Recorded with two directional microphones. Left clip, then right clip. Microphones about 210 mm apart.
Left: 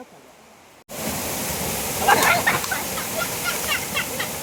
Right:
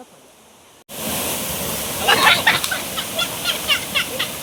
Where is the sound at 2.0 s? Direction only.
40° left (ahead or behind).